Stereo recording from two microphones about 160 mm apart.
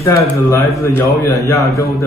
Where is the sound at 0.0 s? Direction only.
20° left (ahead or behind).